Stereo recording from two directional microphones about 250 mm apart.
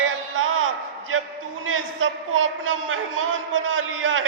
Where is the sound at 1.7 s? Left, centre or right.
Right.